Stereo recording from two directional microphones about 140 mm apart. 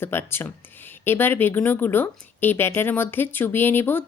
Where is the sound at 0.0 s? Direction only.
15° left (ahead or behind).